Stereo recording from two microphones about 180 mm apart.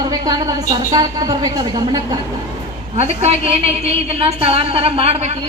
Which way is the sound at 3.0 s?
35° right (ahead or behind).